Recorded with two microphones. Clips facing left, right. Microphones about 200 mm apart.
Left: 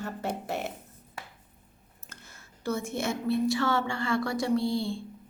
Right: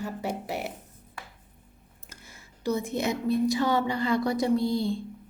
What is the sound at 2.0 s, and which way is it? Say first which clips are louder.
Speech: right 1 dB; 10° right (ahead or behind).